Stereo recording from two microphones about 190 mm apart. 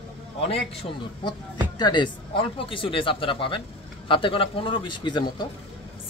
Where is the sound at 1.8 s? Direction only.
25° left (ahead or behind).